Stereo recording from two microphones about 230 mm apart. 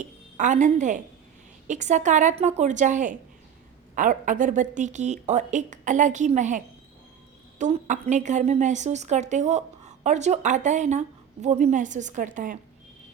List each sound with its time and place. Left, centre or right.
0.0 s a woman's voice: right
7.6 s a woman's voice: right